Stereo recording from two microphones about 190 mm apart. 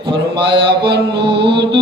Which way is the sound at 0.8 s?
60° right (ahead or behind).